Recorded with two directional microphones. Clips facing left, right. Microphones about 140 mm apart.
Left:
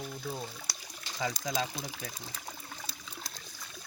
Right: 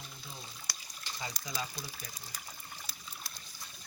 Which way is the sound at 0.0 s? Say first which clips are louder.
Left 11 dB; 65° left (ahead or behind).